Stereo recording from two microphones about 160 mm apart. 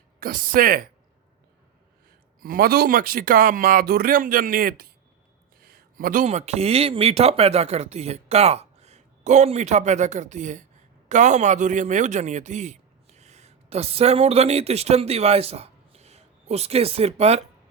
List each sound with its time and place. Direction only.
0.2 s speech: 65° right (ahead or behind)
2.4 s speech: 65° right (ahead or behind)
5.5 s a sound: 70° right (ahead or behind)
6.2 s a man's voice: 40° right (ahead or behind)